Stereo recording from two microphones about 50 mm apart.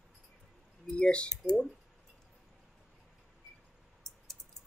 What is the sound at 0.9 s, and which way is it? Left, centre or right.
Speech, centre.